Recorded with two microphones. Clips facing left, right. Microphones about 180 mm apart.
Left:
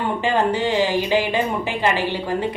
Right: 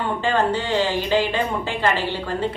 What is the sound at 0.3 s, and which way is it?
A woman's voice, 15° left (ahead or behind).